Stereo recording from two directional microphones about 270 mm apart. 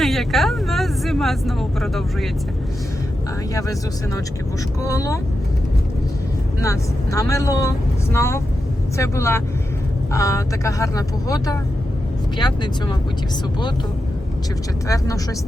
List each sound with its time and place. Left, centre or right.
0.0 s speech: centre
3.5 s speech: centre
6.6 s speech: centre
14.8 s speech: centre